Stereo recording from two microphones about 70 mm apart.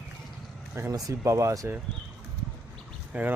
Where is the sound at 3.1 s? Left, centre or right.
Right.